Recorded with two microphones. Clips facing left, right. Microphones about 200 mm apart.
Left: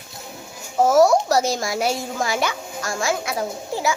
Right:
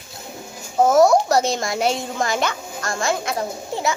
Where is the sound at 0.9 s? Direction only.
5° left (ahead or behind).